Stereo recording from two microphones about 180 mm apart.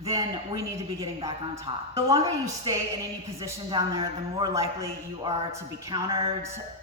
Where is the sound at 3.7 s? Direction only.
25° right (ahead or behind).